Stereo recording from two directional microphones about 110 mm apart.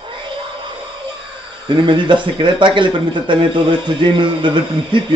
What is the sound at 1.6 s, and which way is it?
Speech, 45° right (ahead or behind).